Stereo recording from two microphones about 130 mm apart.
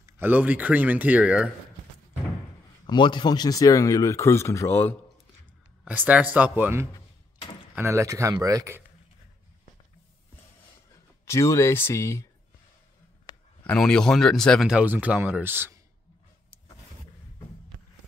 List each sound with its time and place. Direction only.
0.0 s speech: 15° right (ahead or behind)
2.9 s speech: 40° left (ahead or behind); by 4.9 s 15° left (ahead or behind)
5.9 s speech: 10° right (ahead or behind); by 8.7 s 30° right (ahead or behind)
11.2 s speech: 20° left (ahead or behind)
13.3 s a sound: 30° left (ahead or behind)
13.7 s speech: 5° left (ahead or behind); by 15.8 s 15° right (ahead or behind)